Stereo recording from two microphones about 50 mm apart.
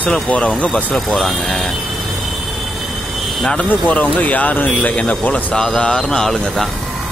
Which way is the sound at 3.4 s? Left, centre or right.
Centre.